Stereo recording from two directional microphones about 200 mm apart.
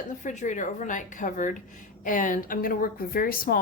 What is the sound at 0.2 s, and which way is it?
A woman's voice, 40° left (ahead or behind).